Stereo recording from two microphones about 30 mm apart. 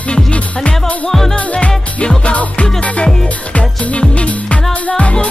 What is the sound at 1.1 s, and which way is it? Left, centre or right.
Music, centre.